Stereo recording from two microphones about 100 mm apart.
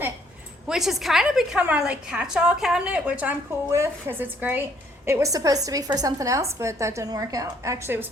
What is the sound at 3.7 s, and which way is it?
Speech, 25° right (ahead or behind).